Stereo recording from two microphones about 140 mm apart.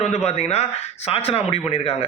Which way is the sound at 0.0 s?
50° left (ahead or behind).